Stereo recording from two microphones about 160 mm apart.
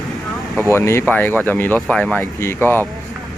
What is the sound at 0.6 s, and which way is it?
Speech, 15° left (ahead or behind).